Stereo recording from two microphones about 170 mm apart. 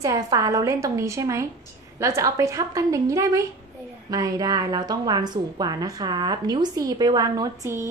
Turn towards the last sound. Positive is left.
turn(degrees=-20)  # may be behind; listen again after turning